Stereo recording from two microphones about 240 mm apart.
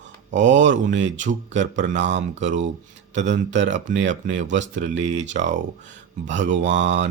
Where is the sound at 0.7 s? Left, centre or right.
Right.